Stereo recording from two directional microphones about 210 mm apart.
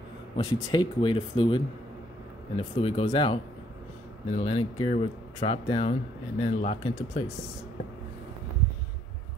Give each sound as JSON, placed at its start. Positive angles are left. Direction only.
{"t": 0.5, "sound": "speech", "side_deg": 20}